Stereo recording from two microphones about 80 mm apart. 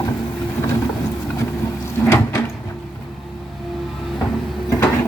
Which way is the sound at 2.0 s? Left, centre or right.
Left.